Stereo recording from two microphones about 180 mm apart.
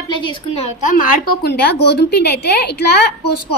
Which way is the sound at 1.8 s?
65° left (ahead or behind).